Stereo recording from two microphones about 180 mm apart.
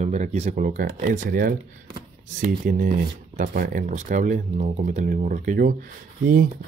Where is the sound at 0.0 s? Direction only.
40° right (ahead or behind).